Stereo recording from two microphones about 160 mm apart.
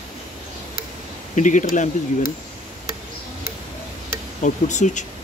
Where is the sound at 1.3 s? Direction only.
50° left (ahead or behind).